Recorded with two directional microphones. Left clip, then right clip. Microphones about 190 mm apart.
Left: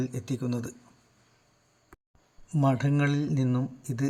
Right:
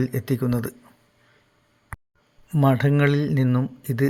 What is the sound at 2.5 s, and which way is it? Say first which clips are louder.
Speech: right 6 dB; 30° right (ahead or behind).